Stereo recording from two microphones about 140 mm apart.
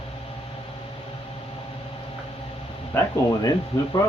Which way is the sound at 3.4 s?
25° left (ahead or behind).